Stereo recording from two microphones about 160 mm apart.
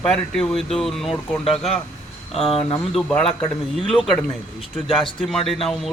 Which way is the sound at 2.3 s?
35° left (ahead or behind).